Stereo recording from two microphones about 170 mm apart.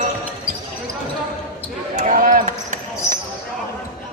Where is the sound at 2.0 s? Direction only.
50° right (ahead or behind).